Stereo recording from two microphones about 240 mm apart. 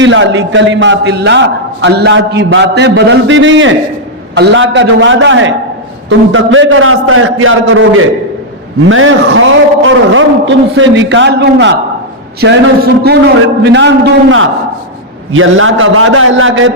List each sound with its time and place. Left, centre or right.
0.0 s a man's voice: right